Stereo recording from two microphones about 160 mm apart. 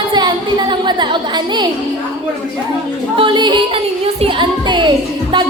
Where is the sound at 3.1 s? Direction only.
30° right (ahead or behind).